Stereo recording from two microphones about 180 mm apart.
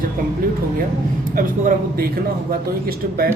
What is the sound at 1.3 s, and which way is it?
Speech, 50° right (ahead or behind).